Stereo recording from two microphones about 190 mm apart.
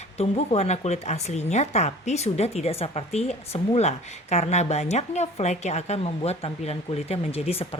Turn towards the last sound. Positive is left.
turn(degrees=30)  # may be behind; listen again after turning